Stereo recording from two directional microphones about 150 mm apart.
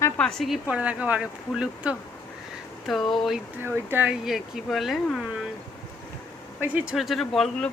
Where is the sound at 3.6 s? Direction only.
10° right (ahead or behind).